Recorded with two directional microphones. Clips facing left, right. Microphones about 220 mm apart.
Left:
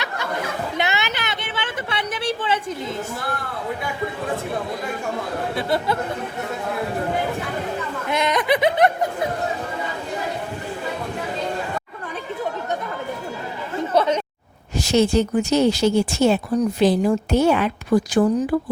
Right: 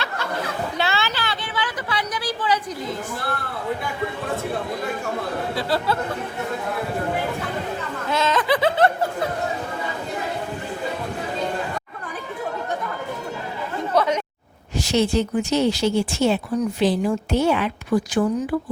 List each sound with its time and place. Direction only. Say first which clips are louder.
0.8 s a sound: even; 20° left (ahead or behind)
5.5 s speech: left 1 dB; 20° left (ahead or behind)
8.1 s snicker: left 1 dB; 20° left (ahead or behind)
13.9 s chatter: left 1 dB; 25° left (ahead or behind)
14.8 s speech: left 3 dB; 40° left (ahead or behind)